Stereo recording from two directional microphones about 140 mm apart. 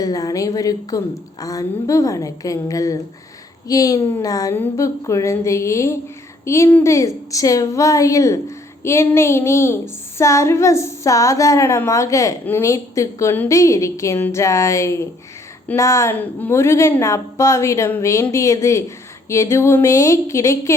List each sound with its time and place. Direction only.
0.0 s a woman's voice: 25° left (ahead or behind)